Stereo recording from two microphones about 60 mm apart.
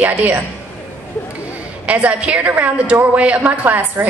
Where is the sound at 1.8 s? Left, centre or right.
Right.